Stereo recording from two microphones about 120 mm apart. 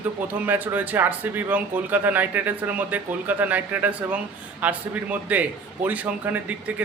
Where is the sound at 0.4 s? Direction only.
15° right (ahead or behind).